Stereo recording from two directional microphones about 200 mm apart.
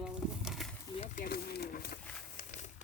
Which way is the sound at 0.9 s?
35° left (ahead or behind).